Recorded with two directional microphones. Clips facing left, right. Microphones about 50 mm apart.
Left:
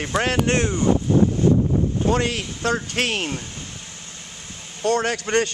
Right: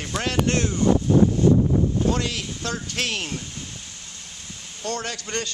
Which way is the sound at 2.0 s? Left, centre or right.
Left.